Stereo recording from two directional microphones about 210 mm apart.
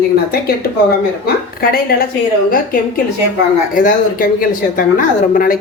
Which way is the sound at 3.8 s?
40° left (ahead or behind).